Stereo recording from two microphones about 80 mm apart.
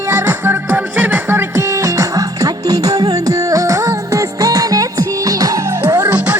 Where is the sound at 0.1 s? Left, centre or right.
Right.